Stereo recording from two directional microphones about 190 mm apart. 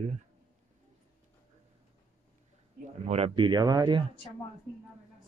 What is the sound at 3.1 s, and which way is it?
Speech, 30° right (ahead or behind).